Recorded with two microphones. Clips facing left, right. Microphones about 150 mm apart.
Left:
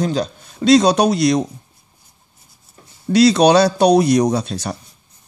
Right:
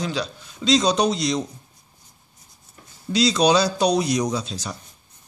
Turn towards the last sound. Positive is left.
turn(degrees=60)  # may be behind; listen again after turning